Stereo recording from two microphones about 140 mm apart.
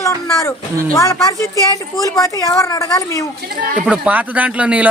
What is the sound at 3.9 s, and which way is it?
Speech, 10° right (ahead or behind).